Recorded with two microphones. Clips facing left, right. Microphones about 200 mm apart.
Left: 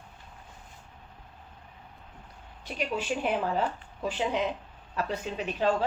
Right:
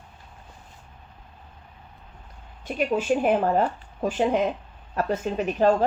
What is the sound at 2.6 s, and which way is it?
A woman's voice, 50° right (ahead or behind).